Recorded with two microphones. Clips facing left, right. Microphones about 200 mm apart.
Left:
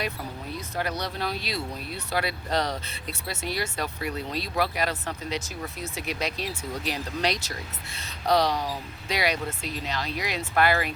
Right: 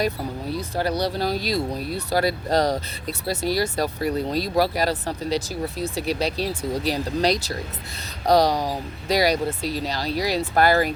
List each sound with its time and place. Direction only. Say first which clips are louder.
0.5 s speech: right 6 dB; 35° right (ahead or behind)